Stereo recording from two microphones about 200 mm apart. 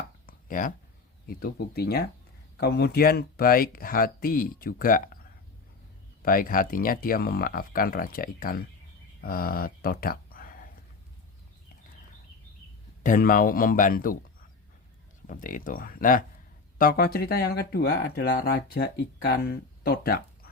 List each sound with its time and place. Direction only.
0.3 s a sound: 45° left (ahead or behind)
1.4 s speech: 50° left (ahead or behind)
6.2 s speech: 45° left (ahead or behind)
13.0 s speech: 45° left (ahead or behind)
15.3 s speech: 40° left (ahead or behind)